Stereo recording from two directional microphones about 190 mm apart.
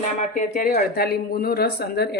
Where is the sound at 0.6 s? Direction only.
50° left (ahead or behind).